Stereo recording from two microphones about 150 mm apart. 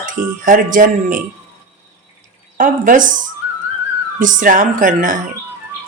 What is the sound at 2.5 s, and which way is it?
Speech, 65° right (ahead or behind).